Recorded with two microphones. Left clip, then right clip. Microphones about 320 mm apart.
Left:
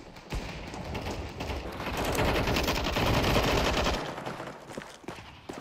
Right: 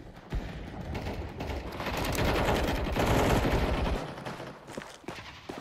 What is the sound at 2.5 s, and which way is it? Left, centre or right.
Gunshot, centre.